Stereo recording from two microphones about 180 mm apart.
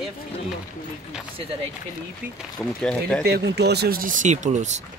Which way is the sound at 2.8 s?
5° left (ahead or behind).